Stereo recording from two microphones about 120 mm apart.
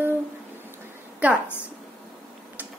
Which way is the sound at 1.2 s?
10° right (ahead or behind).